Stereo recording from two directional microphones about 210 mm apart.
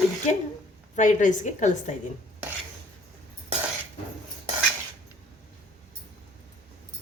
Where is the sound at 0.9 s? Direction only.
35° left (ahead or behind).